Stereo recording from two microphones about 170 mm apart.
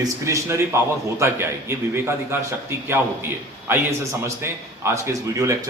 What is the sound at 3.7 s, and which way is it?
A man's voice, 15° right (ahead or behind).